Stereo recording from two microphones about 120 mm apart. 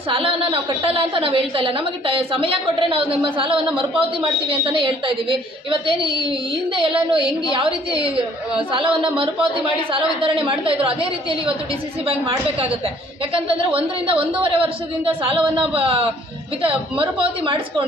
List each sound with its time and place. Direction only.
0.1 s a woman's voice: 50° right (ahead or behind)
13.7 s a woman's voice: 50° right (ahead or behind)